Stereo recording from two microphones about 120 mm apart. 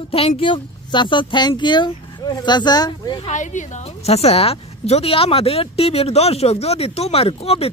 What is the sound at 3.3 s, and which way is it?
A woman's voice, 90° left.